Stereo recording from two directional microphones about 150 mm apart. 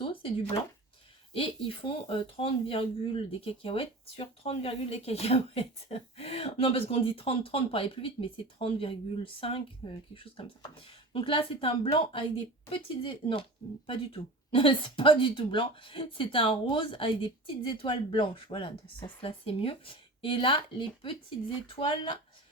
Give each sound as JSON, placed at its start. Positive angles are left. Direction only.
{"t": 0.0, "sound": "a sound", "side_deg": 35}
{"t": 1.3, "sound": "a woman's voice", "side_deg": 35}
{"t": 11.1, "sound": "a woman's voice", "side_deg": 35}
{"t": 14.5, "sound": "a woman's voice", "side_deg": 35}